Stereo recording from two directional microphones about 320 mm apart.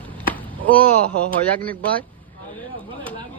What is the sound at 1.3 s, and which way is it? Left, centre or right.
Speech, right.